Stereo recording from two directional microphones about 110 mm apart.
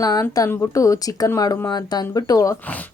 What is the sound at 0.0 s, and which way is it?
Speech, 35° left (ahead or behind).